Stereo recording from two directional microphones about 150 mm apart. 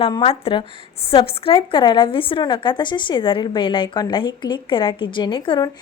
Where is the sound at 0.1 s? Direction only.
40° left (ahead or behind).